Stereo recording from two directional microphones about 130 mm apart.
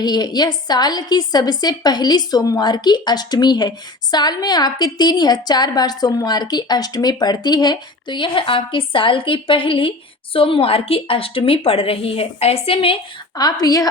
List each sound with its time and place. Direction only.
0.0 s a woman's voice: 35° left (ahead or behind)
13.3 s a woman's voice: 30° left (ahead or behind)